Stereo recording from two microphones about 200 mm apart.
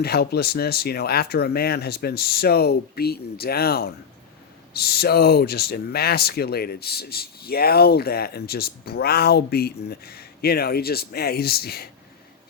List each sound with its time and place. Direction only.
0.0 s speech: 50° left (ahead or behind)